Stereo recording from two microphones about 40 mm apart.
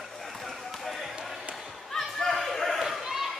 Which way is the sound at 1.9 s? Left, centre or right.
Centre.